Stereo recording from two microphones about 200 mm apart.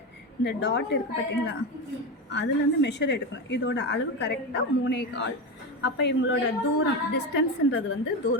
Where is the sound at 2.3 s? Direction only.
60° left (ahead or behind).